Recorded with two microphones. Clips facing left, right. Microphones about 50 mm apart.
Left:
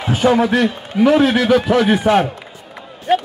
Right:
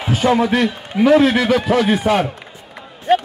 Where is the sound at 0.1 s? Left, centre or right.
Centre.